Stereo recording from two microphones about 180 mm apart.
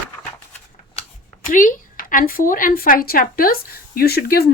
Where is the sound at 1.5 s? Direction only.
50° left (ahead or behind).